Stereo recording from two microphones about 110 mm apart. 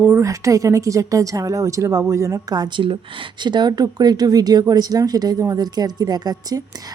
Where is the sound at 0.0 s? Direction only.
25° right (ahead or behind).